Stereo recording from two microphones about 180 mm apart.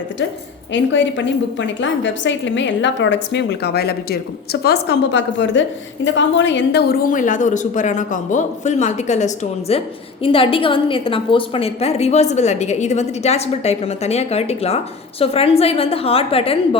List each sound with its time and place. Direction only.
0.7 s a woman's voice: 90° left
7.1 s a woman's voice: 45° left (ahead or behind)